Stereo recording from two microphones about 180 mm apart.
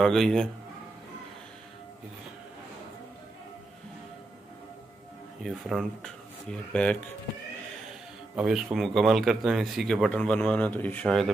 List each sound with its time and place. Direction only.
0.0 s speech: centre (ahead or behind)
5.4 s speech: centre (ahead or behind)
8.4 s speech: 5° right (ahead or behind)